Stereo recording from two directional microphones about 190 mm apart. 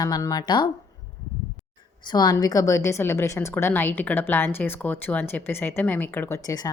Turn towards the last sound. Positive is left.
turn(degrees=20)  # may be behind; listen again after turning